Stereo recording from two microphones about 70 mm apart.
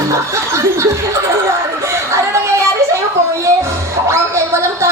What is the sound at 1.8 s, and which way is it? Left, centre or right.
Chatter, right.